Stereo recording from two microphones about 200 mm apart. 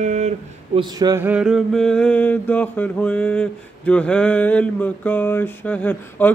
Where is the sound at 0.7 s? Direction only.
20° right (ahead or behind).